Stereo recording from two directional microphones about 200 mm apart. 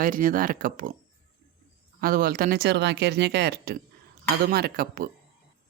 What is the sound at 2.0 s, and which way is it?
Speech, 45° right (ahead or behind).